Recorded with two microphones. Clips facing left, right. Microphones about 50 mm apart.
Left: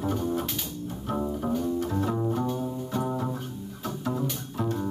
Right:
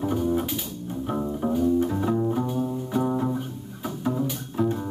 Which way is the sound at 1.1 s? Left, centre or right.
Centre.